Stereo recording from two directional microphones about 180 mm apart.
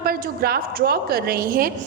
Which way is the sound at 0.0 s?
55° right (ahead or behind).